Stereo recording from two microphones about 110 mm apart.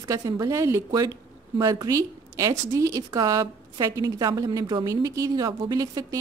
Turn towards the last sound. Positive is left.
turn(degrees=-35)  # may be behind; listen again after turning